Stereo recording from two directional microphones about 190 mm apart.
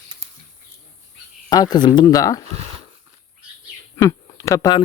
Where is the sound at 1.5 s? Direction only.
20° left (ahead or behind).